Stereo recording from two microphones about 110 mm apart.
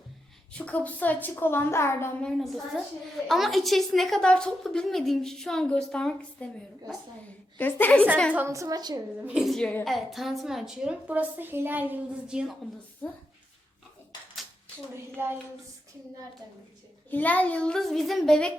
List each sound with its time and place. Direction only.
0.5 s a woman's voice: 10° left (ahead or behind)
2.2 s a woman's voice: centre (ahead or behind)
8.4 s a woman's voice: 30° right (ahead or behind)
9.2 s a woman's voice: 5° right (ahead or behind)
15.2 s a sound: 20° right (ahead or behind)
17.1 s a woman's voice: 15° left (ahead or behind)